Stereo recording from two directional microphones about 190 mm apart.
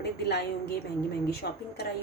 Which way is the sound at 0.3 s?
60° left (ahead or behind).